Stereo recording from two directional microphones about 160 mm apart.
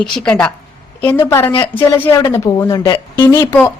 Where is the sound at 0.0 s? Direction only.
5° left (ahead or behind); by 3.6 s 25° left (ahead or behind).